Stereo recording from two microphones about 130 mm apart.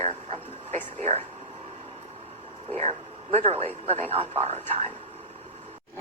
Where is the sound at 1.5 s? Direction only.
50° right (ahead or behind).